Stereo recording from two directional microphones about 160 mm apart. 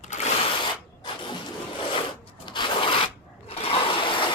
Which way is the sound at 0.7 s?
30° left (ahead or behind).